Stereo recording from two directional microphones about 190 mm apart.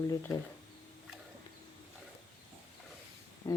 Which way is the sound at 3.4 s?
20° left (ahead or behind).